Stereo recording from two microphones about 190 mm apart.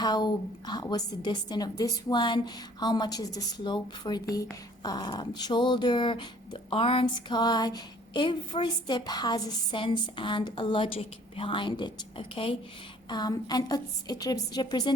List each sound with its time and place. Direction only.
0.0 s speech: 20° left (ahead or behind)